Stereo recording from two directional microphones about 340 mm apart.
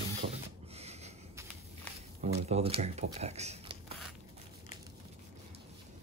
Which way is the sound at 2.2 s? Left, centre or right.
Centre.